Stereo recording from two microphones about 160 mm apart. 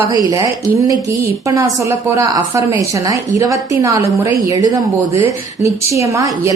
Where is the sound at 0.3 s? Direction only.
20° right (ahead or behind).